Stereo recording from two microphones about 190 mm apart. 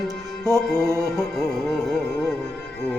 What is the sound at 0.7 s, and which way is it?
Music, 15° left (ahead or behind).